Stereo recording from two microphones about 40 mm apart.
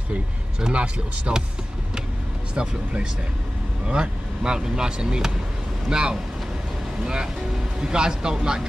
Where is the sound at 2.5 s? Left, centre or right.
Right.